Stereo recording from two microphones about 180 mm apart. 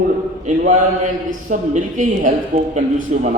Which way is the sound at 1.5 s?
45° right (ahead or behind).